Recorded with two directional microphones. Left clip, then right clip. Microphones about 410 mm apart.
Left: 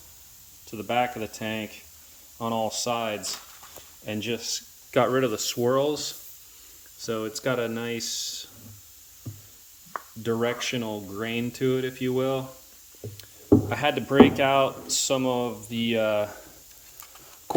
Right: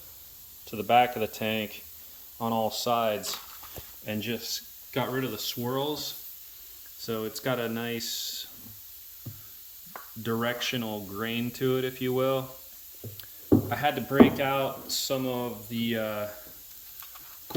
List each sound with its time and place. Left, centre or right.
0.7 s speech: centre
10.2 s speech: centre
13.7 s speech: centre